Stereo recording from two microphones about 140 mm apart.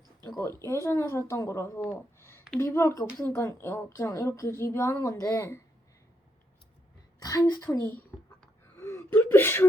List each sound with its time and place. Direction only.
0.3 s a woman's voice: 20° left (ahead or behind)
7.2 s a woman's voice: 25° left (ahead or behind)
8.7 s whimper: 20° left (ahead or behind)